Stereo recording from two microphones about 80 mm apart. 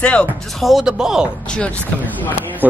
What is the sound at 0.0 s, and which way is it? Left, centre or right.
Speech, centre.